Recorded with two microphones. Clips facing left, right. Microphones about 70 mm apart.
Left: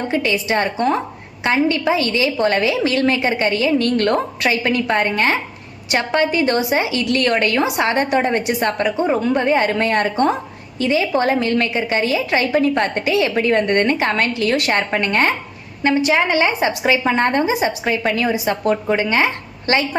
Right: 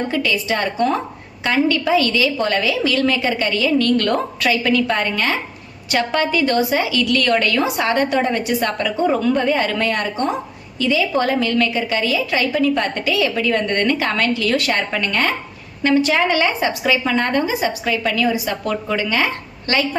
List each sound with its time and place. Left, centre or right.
0.1 s a woman's voice: left
15.8 s a woman's voice: centre